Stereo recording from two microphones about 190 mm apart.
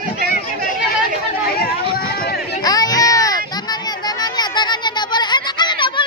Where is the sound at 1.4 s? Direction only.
50° left (ahead or behind).